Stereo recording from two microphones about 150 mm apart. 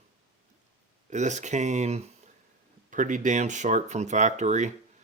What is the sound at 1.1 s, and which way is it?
Speech, 50° right (ahead or behind).